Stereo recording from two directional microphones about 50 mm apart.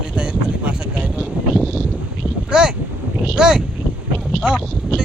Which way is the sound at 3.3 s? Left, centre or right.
Centre.